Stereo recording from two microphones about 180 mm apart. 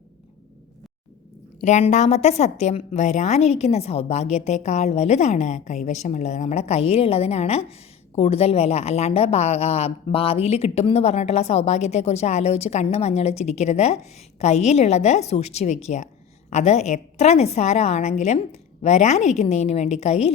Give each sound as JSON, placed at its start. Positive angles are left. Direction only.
{"t": 1.6, "sound": "a woman's voice", "side_deg": 40}